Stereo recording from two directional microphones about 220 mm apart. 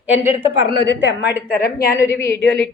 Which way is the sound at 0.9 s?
50° left (ahead or behind).